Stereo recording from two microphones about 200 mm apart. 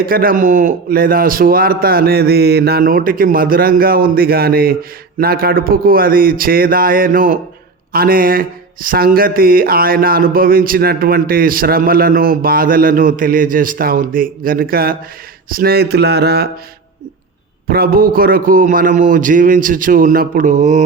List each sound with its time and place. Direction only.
0.0 s a man's voice: 45° right (ahead or behind)
17.7 s a man's voice: 50° right (ahead or behind)